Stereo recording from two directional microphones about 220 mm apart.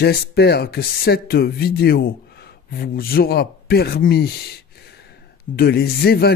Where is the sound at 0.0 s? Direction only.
45° left (ahead or behind).